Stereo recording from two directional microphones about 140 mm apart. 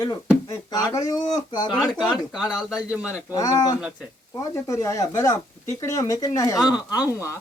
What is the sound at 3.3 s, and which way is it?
Speech, 25° left (ahead or behind).